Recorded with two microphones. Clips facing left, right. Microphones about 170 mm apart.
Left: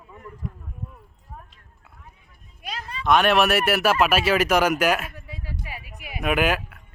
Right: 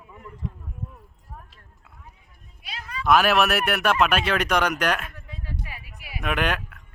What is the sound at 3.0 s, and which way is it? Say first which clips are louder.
Speech: left 1 dB; 5° right (ahead or behind).